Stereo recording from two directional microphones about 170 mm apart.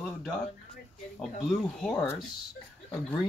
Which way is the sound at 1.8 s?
5° left (ahead or behind).